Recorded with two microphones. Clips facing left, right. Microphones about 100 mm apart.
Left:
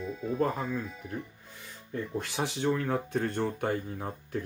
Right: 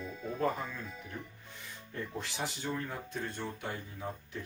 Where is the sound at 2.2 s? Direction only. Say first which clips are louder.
Left 8 dB; 65° left (ahead or behind).